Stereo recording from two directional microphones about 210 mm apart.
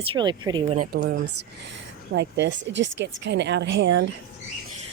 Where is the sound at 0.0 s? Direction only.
25° right (ahead or behind).